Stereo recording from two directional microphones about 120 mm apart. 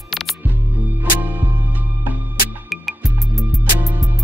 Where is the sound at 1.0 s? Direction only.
15° right (ahead or behind).